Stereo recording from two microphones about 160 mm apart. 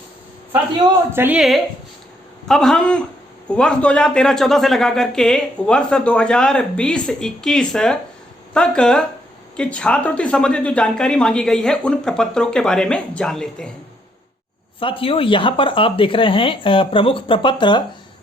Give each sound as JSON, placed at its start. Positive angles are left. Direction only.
{"t": 1.1, "sound": "a woman's voice", "side_deg": -15}
{"t": 1.4, "sound": "a man's voice", "side_deg": 0}
{"t": 14.8, "sound": "speech", "side_deg": 35}